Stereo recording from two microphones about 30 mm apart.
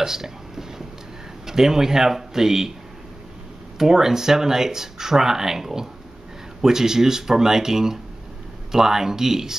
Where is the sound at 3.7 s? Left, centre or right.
Centre.